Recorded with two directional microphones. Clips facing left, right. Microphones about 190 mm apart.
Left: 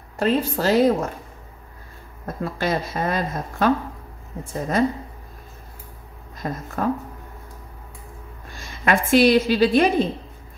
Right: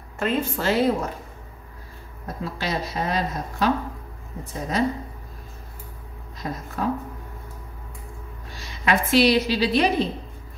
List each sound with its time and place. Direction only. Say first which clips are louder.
0.2 s a woman's voice: left 4 dB; 35° left (ahead or behind)
2.2 s a woman's voice: left 4 dB; 50° left (ahead or behind)
6.4 s a woman's voice: left 2 dB; 50° left (ahead or behind)
8.5 s a woman's voice: left 2 dB; 50° left (ahead or behind)